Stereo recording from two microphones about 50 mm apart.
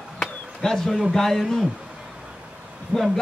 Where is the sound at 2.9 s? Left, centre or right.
Right.